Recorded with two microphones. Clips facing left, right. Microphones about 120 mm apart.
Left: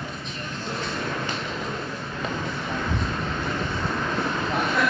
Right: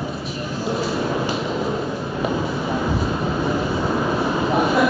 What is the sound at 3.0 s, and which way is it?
Vehicle, 10° right (ahead or behind).